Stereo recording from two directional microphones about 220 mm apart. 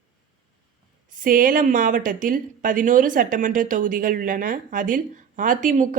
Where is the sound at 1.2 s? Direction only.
40° right (ahead or behind).